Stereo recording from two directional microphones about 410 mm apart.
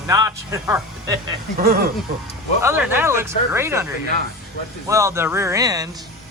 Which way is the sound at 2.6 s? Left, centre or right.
Centre.